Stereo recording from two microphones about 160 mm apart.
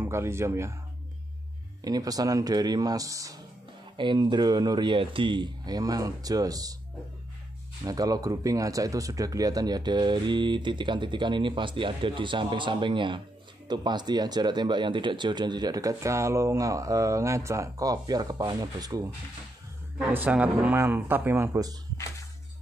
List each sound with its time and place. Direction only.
0.0 s speech: 15° right (ahead or behind)
1.9 s speech: 25° right (ahead or behind)
7.8 s speech: 25° right (ahead or behind)
20.0 s speech: 10° right (ahead or behind)